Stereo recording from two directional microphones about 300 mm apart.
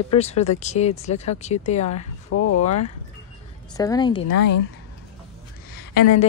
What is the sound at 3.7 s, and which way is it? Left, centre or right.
Speech, centre.